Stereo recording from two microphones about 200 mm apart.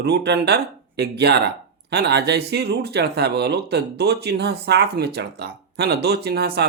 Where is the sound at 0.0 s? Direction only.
55° right (ahead or behind).